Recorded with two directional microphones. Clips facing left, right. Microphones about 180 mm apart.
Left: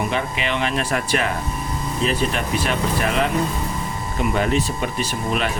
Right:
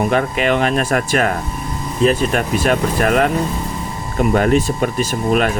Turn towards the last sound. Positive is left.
turn(degrees=-45)  # may be behind; listen again after turning